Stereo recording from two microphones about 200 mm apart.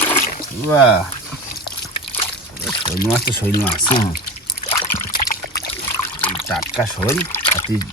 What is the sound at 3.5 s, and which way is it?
Speech, 10° left (ahead or behind).